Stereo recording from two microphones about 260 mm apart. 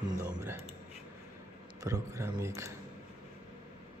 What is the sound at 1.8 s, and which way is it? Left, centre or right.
Speech, centre.